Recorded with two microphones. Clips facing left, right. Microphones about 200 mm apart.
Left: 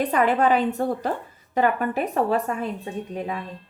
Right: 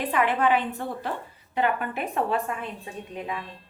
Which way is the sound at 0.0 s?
40° left (ahead or behind).